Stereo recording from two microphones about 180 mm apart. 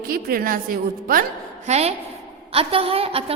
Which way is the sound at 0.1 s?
55° right (ahead or behind).